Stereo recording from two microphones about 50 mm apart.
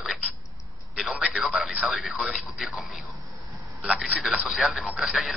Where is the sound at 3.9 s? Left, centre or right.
Right.